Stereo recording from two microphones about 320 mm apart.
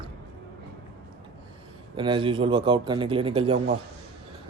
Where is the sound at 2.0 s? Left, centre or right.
Centre.